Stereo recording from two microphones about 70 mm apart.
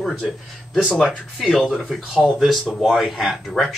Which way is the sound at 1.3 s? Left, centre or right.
Centre.